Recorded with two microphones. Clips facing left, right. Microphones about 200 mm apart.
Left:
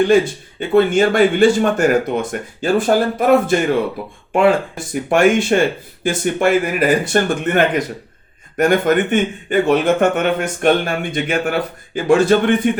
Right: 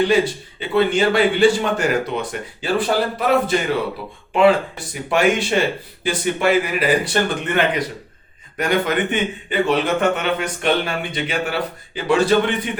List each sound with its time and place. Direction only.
0.6 s a man's voice: 50° left (ahead or behind)
5.0 s a man's voice: 50° left (ahead or behind)